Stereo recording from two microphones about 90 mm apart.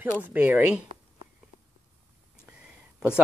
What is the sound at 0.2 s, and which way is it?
Speech, 20° right (ahead or behind).